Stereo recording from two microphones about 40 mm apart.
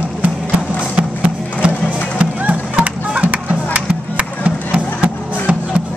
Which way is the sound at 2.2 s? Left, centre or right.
Right.